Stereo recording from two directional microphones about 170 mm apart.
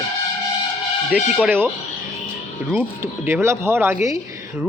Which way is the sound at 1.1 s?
10° right (ahead or behind).